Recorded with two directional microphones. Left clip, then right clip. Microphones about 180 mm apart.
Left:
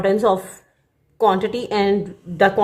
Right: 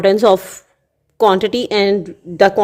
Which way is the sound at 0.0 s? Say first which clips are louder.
Right 6 dB; 50° right (ahead or behind).